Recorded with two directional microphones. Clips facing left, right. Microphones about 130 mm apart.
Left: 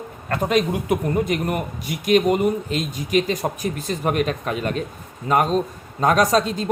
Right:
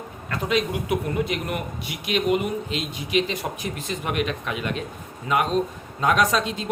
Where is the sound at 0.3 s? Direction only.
45° left (ahead or behind).